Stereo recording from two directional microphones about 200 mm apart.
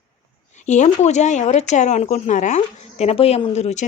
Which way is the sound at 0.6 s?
35° left (ahead or behind).